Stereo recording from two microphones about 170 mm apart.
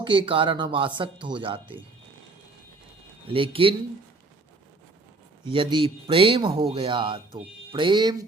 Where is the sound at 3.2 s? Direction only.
30° right (ahead or behind).